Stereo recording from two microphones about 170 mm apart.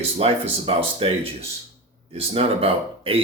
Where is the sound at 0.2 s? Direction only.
35° right (ahead or behind).